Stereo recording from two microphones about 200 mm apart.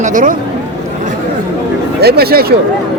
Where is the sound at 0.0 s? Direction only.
40° right (ahead or behind).